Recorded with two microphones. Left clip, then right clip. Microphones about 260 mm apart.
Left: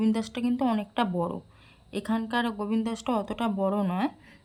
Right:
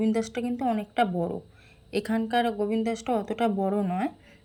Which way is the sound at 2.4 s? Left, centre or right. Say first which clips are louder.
Right 5 dB; left.